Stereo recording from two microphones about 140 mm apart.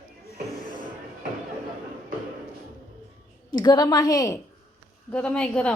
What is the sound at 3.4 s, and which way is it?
Speech, 30° left (ahead or behind).